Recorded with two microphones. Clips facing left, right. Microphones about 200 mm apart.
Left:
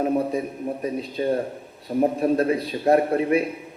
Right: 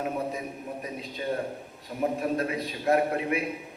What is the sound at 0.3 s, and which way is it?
A man's voice, 35° left (ahead or behind).